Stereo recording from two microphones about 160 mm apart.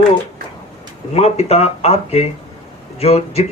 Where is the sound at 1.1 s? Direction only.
40° left (ahead or behind).